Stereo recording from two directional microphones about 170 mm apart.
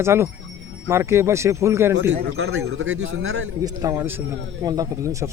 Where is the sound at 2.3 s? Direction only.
90° right.